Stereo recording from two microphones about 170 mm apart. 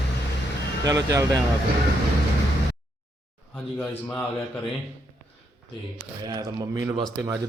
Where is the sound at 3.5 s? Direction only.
10° left (ahead or behind).